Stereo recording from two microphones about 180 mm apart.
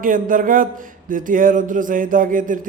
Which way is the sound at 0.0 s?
50° right (ahead or behind).